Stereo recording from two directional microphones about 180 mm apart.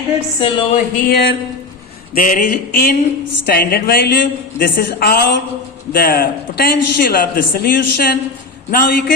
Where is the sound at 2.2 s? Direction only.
50° left (ahead or behind).